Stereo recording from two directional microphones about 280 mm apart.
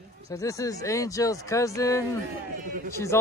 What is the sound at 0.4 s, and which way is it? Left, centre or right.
Speech, centre.